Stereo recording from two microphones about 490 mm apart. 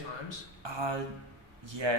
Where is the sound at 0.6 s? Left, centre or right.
Right.